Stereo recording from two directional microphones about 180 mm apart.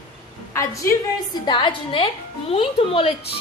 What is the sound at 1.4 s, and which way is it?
A woman's voice, 25° left (ahead or behind).